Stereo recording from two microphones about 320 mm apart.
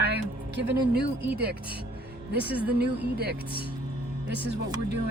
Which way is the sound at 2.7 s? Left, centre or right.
Right.